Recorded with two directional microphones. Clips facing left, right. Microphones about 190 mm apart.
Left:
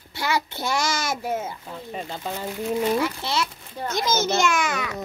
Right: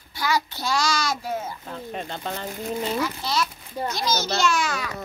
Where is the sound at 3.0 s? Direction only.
25° left (ahead or behind).